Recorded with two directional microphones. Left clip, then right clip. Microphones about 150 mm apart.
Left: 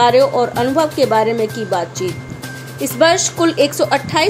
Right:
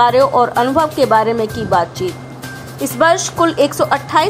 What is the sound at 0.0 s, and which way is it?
A woman's voice, 5° left (ahead or behind).